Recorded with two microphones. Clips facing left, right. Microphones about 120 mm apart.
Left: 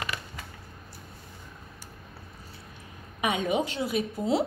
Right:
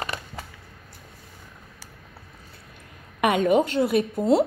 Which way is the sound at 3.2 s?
60° right (ahead or behind).